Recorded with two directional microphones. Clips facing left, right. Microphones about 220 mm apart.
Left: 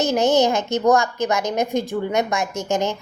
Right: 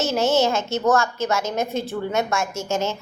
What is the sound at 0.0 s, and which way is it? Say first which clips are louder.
A child's voice: left 2 dB; 15° left (ahead or behind).